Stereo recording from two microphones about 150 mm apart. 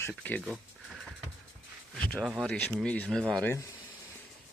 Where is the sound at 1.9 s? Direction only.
5° left (ahead or behind).